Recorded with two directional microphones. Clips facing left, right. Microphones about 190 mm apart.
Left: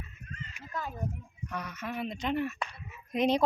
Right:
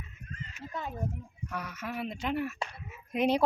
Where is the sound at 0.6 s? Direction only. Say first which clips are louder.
Right 1 dB; 25° right (ahead or behind).